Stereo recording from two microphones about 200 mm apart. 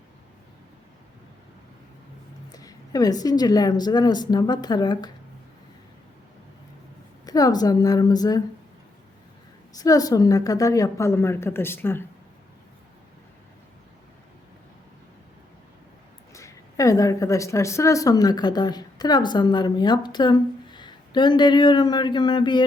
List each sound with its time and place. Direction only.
2.5 s speech: 20° left (ahead or behind)
7.3 s speech: 20° left (ahead or behind)
9.7 s a woman's voice: 20° left (ahead or behind)
16.3 s a woman's voice: 15° left (ahead or behind)